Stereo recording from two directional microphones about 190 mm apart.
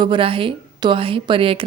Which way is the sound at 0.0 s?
25° right (ahead or behind).